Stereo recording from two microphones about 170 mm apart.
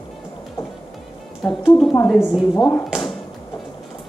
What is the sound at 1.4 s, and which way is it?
Speech, 5° left (ahead or behind).